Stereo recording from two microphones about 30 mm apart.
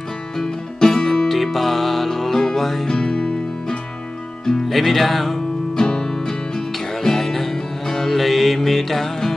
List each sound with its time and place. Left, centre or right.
0.4 s music: centre
1.2 s music: centre
2.9 s music: left
4.6 s music: centre
5.8 s music: left